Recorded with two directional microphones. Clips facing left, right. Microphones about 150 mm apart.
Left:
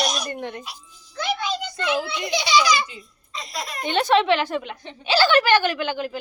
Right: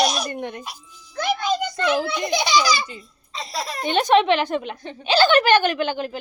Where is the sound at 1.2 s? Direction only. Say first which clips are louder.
Right 4 dB; 45° right (ahead or behind).